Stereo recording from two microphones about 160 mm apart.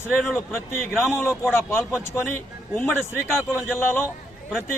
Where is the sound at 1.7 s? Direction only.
15° left (ahead or behind).